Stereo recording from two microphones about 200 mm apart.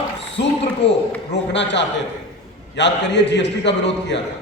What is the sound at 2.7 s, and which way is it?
A man's voice, 60° left (ahead or behind).